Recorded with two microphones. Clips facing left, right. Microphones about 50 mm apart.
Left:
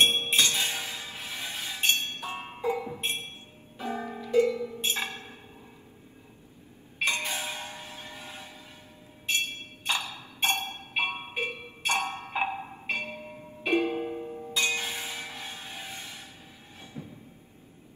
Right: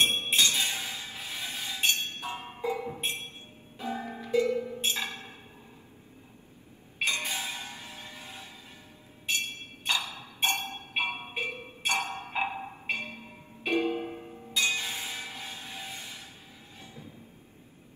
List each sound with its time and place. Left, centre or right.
0.0 s music: left
4.6 s a sound: right
4.8 s music: left
7.0 s clang: left
9.8 s ping: left
10.4 s music: left
11.8 s wood block: left
12.9 s music: left
14.3 s a sound: left
16.8 s train: left